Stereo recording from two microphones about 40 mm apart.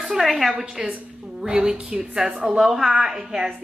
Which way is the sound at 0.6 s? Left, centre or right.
Right.